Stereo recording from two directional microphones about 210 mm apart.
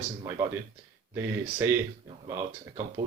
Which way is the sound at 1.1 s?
10° right (ahead or behind).